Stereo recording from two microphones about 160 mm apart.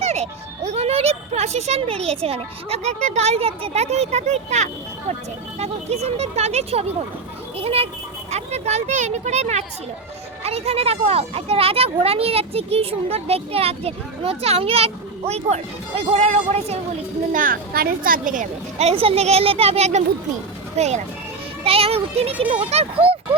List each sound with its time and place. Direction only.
0.0 s a child's voice: 45° right (ahead or behind)
17.3 s speech: 60° right (ahead or behind); by 23.1 s 40° right (ahead or behind)